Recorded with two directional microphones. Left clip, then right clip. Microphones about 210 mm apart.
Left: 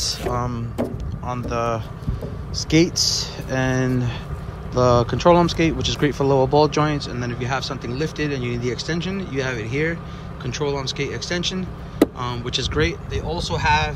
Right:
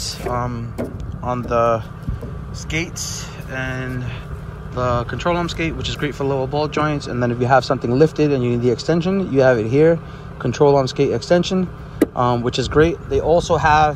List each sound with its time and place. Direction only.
0.3 s speech: 15° left (ahead or behind)
2.5 s speech: 25° left (ahead or behind); by 13.9 s 5° right (ahead or behind)